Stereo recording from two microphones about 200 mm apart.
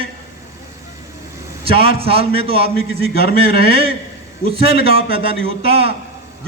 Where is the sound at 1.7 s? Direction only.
30° right (ahead or behind).